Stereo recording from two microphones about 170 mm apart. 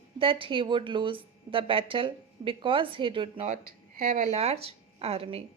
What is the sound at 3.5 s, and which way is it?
Speech, 55° right (ahead or behind).